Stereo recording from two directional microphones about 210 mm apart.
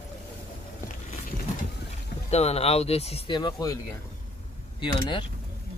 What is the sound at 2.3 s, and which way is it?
Speech, 30° left (ahead or behind).